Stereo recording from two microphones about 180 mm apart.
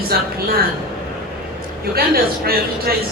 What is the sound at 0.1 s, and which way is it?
Speech, 60° right (ahead or behind).